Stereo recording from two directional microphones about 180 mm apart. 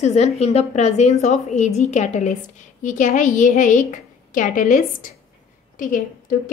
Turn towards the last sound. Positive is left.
turn(degrees=50)  # may be behind; listen again after turning